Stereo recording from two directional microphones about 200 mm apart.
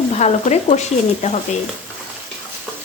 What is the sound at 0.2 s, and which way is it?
A woman's voice, 35° left (ahead or behind).